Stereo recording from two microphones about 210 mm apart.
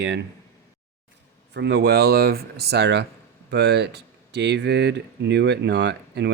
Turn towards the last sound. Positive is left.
turn(degrees=-55)  # may be behind; listen again after turning